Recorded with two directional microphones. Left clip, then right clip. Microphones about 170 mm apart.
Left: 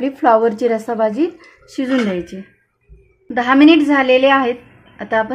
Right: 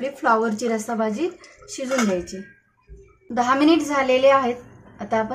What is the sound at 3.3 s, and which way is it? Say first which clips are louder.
A woman's voice: left 7 dB; 45° left (ahead or behind).